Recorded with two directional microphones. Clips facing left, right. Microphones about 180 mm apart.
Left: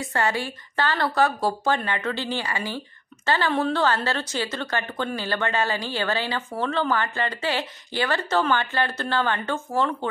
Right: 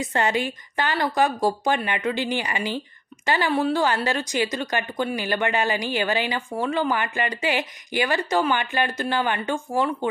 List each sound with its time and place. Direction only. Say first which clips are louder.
0.0 s a woman's voice: right 2 dB; 20° right (ahead or behind)